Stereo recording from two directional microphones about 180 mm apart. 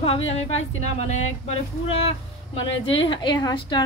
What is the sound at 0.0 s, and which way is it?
Speech, 35° left (ahead or behind).